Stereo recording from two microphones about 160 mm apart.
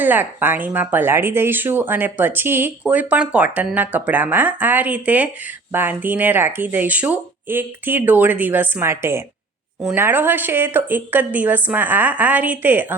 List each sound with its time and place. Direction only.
0.0 s speech: 10° right (ahead or behind)